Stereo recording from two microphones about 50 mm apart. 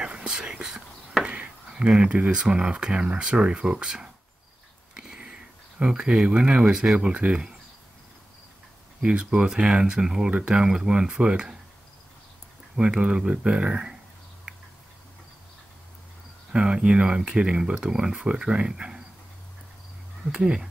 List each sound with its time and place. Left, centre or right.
0.0 s whispering: centre
1.2 s a sound: right
1.7 s speech: centre
4.9 s a sound: centre
7.1 s speech: right
9.0 s speech: centre
12.7 s speech: centre
16.5 s speech: centre
20.2 s speech: centre